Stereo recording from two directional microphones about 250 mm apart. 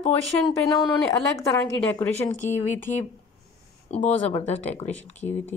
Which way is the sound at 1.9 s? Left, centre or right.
Centre.